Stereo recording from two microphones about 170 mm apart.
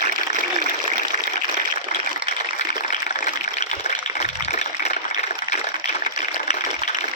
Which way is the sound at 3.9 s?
40° left (ahead or behind).